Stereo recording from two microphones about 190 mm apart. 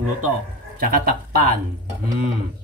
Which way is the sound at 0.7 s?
50° right (ahead or behind).